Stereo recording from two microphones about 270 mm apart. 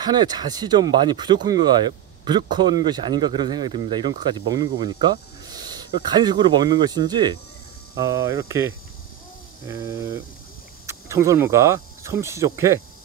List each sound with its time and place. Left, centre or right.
0.0 s speech: centre